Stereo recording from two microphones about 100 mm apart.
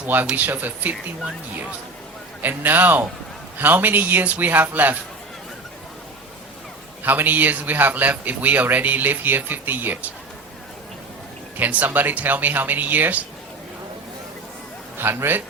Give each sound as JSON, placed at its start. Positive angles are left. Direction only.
{"t": 0.0, "sound": "speech", "side_deg": -15}
{"t": 2.4, "sound": "a man's voice", "side_deg": -20}
{"t": 7.0, "sound": "speech", "side_deg": -20}
{"t": 11.5, "sound": "speech", "side_deg": -15}
{"t": 14.9, "sound": "a man's voice", "side_deg": -20}